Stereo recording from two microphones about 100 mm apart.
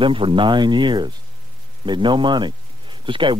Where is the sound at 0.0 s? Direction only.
60° right (ahead or behind).